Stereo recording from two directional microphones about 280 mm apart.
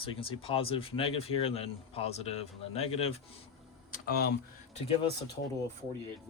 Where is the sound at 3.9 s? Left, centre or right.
Left.